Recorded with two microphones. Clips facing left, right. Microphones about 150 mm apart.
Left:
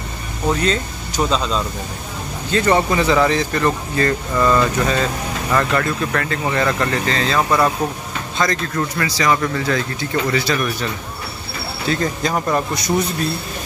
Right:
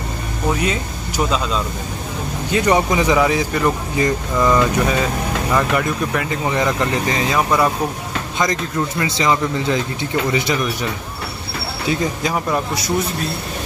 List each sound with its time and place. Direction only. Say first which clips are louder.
0.5 s speech: left 2 dB; 10° right (ahead or behind)
11.9 s speech: even; 10° right (ahead or behind)